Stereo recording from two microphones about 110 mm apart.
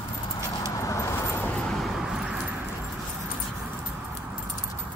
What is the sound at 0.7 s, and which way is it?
Vehicle, 30° left (ahead or behind).